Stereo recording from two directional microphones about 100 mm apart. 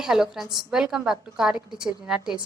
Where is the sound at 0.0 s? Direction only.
5° right (ahead or behind).